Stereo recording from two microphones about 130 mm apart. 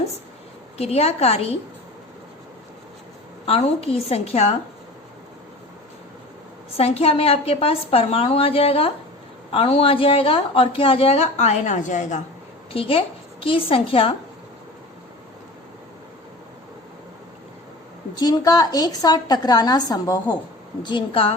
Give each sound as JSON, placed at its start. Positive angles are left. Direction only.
{"t": 0.8, "sound": "a woman's voice", "side_deg": 50}
{"t": 3.4, "sound": "a woman's voice", "side_deg": 50}
{"t": 6.7, "sound": "a woman's voice", "side_deg": 50}
{"t": 12.7, "sound": "a woman's voice", "side_deg": 45}
{"t": 18.2, "sound": "a woman's voice", "side_deg": 30}